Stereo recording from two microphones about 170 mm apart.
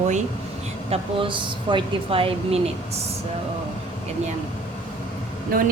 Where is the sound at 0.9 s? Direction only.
30° right (ahead or behind).